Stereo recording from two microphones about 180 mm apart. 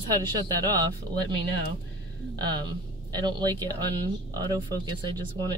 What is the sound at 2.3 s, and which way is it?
Speech, 25° right (ahead or behind).